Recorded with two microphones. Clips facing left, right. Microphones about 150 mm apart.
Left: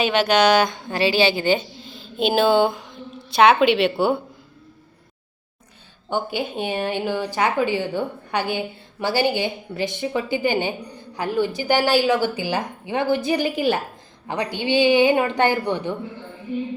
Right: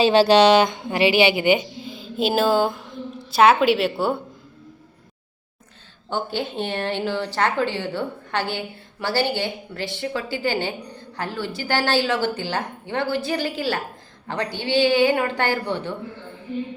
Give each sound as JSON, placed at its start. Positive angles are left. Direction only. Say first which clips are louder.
{"t": 0.0, "sound": "a woman's voice", "louder": "right 4 dB", "side_deg": -30}
{"t": 6.1, "sound": "a woman's voice", "louder": "left 1 dB", "side_deg": 15}